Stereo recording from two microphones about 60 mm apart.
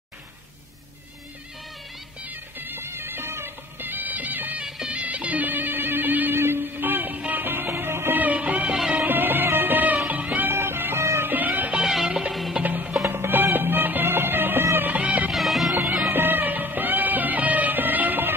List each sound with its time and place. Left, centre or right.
2.6 s music: right
4.6 s music: centre
4.9 s music: right
8.2 s music of bollywood: right
8.9 s music: right
11.3 s music: right
11.8 s music: centre
12.6 s music: right
14.9 s music: right
15.3 s music: centre
16.1 s music: right